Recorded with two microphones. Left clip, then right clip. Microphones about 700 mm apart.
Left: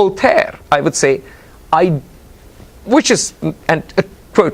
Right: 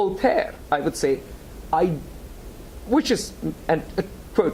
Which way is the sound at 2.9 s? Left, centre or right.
Left.